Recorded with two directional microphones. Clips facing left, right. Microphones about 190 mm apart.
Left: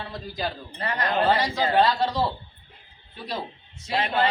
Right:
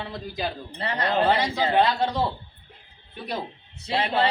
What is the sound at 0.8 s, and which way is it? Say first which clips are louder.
A man's voice: right 1 dB; 25° right (ahead or behind).